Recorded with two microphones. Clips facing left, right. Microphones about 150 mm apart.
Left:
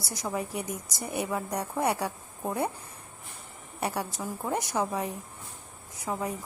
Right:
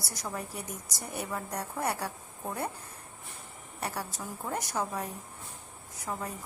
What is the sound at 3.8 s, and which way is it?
A woman's voice, 15° left (ahead or behind).